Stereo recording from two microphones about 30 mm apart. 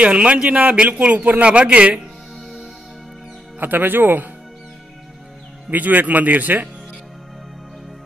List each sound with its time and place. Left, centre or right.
0.0 s a man's voice: right
1.1 s speech: right
1.4 s a man's voice: right
3.5 s speech: right
5.7 s speech: right